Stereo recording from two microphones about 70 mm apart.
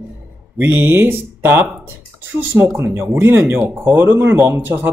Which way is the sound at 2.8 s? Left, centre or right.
Right.